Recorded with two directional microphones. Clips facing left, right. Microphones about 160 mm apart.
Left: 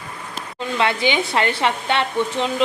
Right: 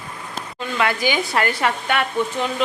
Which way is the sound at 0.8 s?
25° left (ahead or behind).